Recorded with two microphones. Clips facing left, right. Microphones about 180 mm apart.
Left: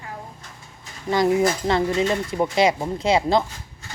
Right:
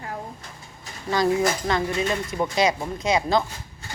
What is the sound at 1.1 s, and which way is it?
A woman's voice, 20° left (ahead or behind).